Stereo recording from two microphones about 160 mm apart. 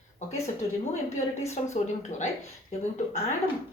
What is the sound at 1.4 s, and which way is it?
Speech, 45° left (ahead or behind).